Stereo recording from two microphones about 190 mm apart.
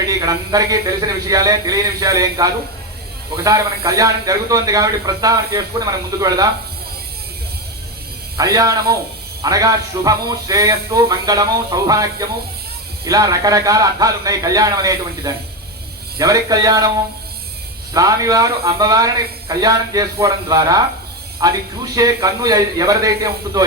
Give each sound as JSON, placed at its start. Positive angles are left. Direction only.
{"t": 0.0, "sound": "a man's voice", "side_deg": -20}
{"t": 8.4, "sound": "speech", "side_deg": -20}
{"t": 13.1, "sound": "a man's voice", "side_deg": -20}
{"t": 17.9, "sound": "a man's voice", "side_deg": -20}